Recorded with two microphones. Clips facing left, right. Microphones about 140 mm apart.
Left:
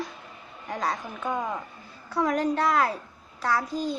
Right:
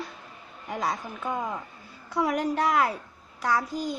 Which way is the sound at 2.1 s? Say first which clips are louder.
Left 1 dB; 10° right (ahead or behind).